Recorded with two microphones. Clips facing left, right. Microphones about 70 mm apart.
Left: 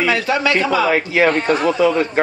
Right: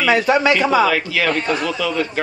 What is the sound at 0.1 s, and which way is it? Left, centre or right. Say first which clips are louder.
Speech: right 2 dB; right.